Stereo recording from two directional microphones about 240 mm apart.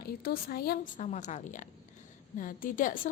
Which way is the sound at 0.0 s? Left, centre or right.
Left.